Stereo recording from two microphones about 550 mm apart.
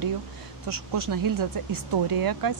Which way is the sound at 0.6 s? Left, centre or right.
Right.